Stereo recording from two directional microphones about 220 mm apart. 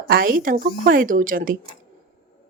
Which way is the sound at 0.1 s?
40° right (ahead or behind).